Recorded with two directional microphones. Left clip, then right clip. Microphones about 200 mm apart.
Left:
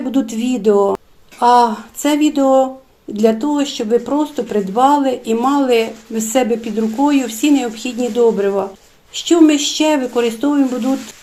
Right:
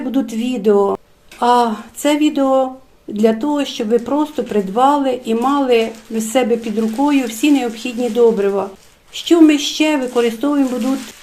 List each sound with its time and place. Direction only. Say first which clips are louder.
0.1 s speech: left 2 dB; 5° left (ahead or behind)